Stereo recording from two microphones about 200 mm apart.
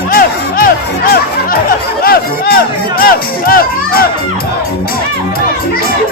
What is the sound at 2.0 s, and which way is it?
Speech, 50° left (ahead or behind).